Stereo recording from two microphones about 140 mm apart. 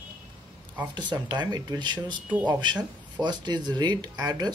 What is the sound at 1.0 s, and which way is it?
Speech, 30° right (ahead or behind).